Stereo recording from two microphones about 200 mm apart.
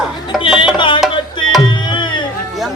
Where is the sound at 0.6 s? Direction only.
25° left (ahead or behind).